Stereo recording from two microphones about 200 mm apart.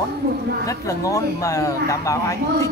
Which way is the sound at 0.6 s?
15° left (ahead or behind).